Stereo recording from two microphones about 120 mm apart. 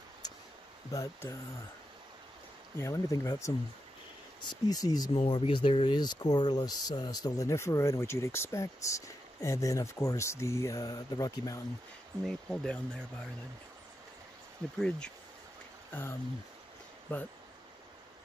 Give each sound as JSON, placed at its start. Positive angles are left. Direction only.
{"t": 0.9, "sound": "speech", "side_deg": 25}
{"t": 2.8, "sound": "speech", "side_deg": 25}
{"t": 5.1, "sound": "speech", "side_deg": 50}
{"t": 12.3, "sound": "speech", "side_deg": 5}
{"t": 14.8, "sound": "speech", "side_deg": 5}
{"t": 15.9, "sound": "speech", "side_deg": 20}